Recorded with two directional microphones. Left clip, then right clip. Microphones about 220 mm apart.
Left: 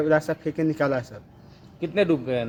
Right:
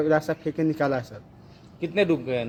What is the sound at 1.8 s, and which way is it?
Speech, 35° left (ahead or behind).